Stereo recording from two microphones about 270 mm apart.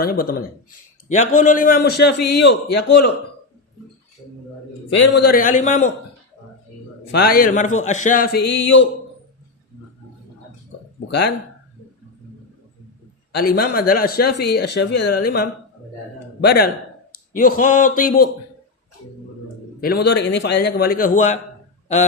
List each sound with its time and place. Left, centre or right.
0.0 s a man's voice: left
4.9 s a man's voice: left
7.1 s a man's voice: left
8.5 s a sound: left
13.4 s a man's voice: left
19.8 s a man's voice: left